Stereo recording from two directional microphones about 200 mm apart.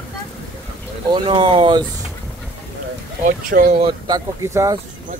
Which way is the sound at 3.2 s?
45° right (ahead or behind).